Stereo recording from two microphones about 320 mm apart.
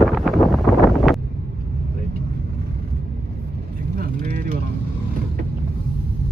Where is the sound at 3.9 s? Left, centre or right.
Right.